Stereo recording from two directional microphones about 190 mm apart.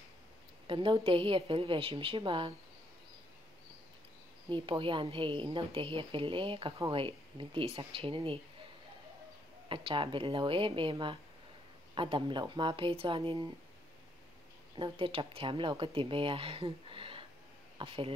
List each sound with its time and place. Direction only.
0.7 s a woman's voice: 25° right (ahead or behind)
4.5 s a woman's voice: 25° right (ahead or behind)
9.7 s a woman's voice: 25° right (ahead or behind)
14.8 s a woman's voice: 30° right (ahead or behind)